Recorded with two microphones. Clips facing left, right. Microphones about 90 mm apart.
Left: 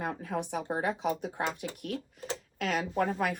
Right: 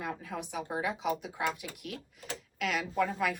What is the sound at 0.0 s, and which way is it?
Speech, 45° left (ahead or behind).